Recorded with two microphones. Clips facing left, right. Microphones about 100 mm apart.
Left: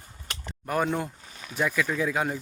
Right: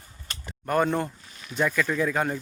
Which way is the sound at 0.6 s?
5° left (ahead or behind).